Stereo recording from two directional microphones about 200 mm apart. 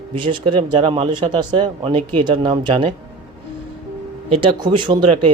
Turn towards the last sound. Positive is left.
turn(degrees=-25)  # may be behind; listen again after turning